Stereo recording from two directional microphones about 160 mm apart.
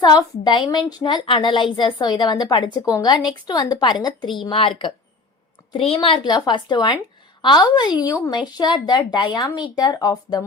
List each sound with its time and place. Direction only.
0.0 s a woman's voice: 25° left (ahead or behind)
5.7 s a woman's voice: 35° left (ahead or behind)